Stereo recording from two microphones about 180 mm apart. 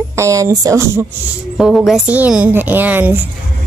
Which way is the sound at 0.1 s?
15° right (ahead or behind).